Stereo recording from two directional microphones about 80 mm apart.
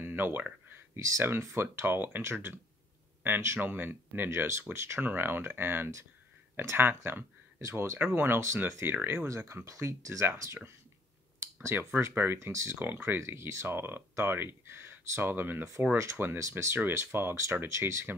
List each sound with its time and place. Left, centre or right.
0.0 s a sound: right
0.9 s speech: right
8.9 s speech: right
9.3 s speech: right
11.7 s speech: right